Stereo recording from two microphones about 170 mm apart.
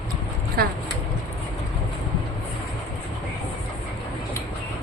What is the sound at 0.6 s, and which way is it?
Speech, 60° right (ahead or behind).